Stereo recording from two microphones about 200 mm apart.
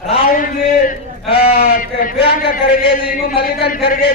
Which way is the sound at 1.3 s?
55° left (ahead or behind).